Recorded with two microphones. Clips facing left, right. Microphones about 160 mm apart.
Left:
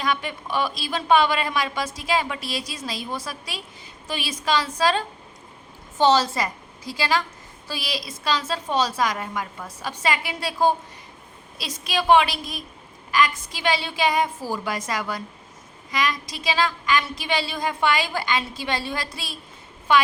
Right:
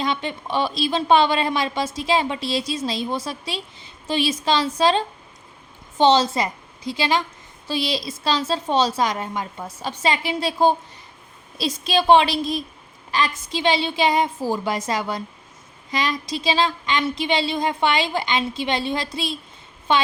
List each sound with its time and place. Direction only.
0.0 s a woman's voice: 25° right (ahead or behind)